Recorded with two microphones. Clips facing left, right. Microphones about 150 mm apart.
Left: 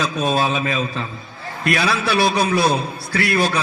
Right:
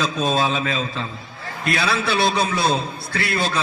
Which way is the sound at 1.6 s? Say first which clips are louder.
Left 2 dB; 30° right (ahead or behind).